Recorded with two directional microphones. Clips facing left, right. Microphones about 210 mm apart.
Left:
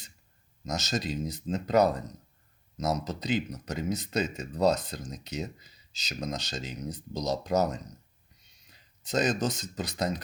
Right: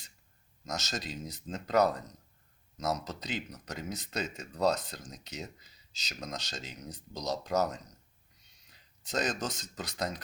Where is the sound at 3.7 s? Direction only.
15° left (ahead or behind).